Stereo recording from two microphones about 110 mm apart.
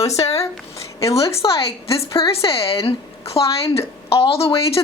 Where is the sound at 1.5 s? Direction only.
60° left (ahead or behind).